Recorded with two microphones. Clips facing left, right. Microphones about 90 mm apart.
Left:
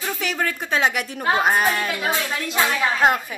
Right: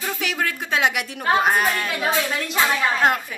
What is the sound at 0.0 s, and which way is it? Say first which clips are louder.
A woman's voice: even; centre (ahead or behind).